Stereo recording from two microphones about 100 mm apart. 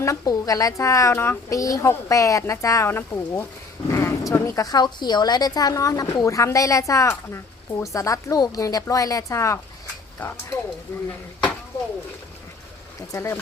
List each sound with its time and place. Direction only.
0.0 s a woman's voice: 35° left (ahead or behind)
3.9 s dog: 30° left (ahead or behind)
4.3 s a woman's voice: 30° left (ahead or behind)
13.1 s speech: 25° left (ahead or behind)